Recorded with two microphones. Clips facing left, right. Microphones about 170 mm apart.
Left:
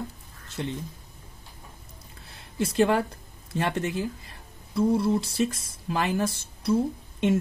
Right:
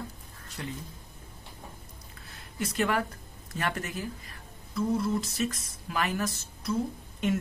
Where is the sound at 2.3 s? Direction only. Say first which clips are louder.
Left 7 dB; 30° left (ahead or behind).